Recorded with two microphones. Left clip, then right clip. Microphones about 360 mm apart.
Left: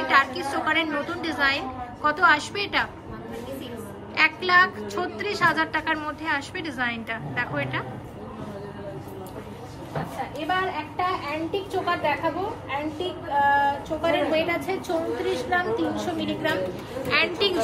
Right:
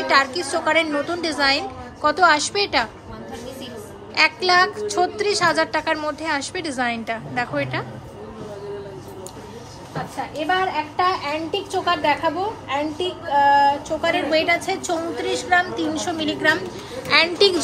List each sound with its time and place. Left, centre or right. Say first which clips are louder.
0.1 s a woman's voice: right 3 dB; centre
4.1 s a woman's voice: right 3 dB; centre
11.0 s a woman's voice: right 5 dB; right